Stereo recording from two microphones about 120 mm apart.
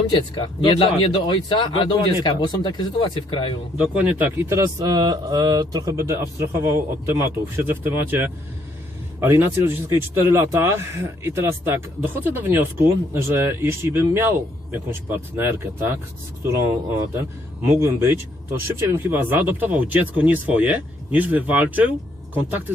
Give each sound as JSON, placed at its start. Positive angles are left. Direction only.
{"t": 0.1, "sound": "speech", "side_deg": 40}
{"t": 3.8, "sound": "speech", "side_deg": -10}
{"t": 17.7, "sound": "speech", "side_deg": -20}